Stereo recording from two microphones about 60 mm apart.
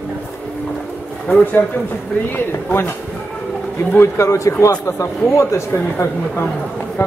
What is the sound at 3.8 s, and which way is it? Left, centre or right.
Speech, left.